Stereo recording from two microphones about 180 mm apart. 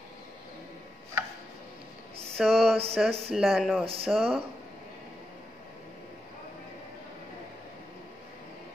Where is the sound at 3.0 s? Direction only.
Centre (ahead or behind).